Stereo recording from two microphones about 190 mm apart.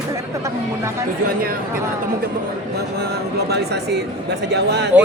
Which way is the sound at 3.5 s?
60° right (ahead or behind).